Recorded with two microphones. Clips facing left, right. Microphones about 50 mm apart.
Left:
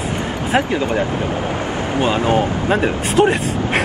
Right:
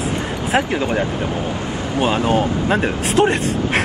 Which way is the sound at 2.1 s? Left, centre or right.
Left.